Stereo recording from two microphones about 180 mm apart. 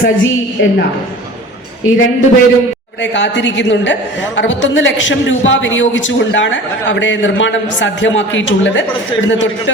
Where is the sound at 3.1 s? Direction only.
85° left.